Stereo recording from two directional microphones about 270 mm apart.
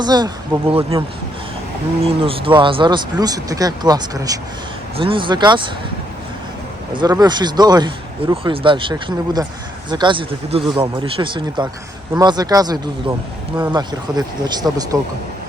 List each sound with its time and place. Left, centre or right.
0.0 s speech: centre
6.9 s speech: centre